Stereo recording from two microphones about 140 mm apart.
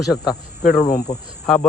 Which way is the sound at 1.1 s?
65° left (ahead or behind).